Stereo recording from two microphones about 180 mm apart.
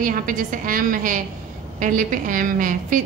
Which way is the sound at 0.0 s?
50° right (ahead or behind).